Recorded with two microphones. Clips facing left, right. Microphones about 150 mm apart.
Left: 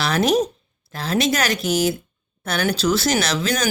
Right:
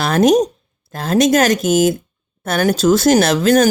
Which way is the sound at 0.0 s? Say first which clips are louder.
Right 6 dB; 45° right (ahead or behind).